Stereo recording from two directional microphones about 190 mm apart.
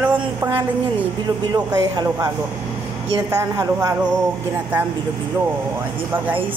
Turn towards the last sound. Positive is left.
turn(degrees=-10)  # may be behind; listen again after turning